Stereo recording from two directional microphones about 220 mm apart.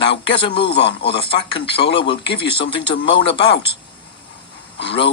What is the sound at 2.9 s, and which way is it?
Speech, 55° left (ahead or behind).